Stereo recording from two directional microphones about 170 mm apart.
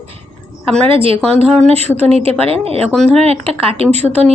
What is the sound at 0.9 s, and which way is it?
A woman's voice, 35° right (ahead or behind).